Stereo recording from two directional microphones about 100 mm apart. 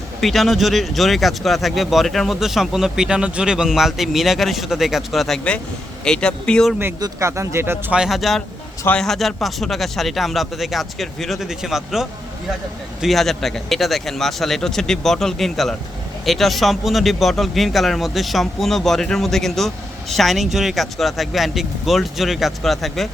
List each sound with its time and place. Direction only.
0.2 s speech: centre (ahead or behind)
7.0 s speech: 30° right (ahead or behind)
7.9 s speech: 5° right (ahead or behind)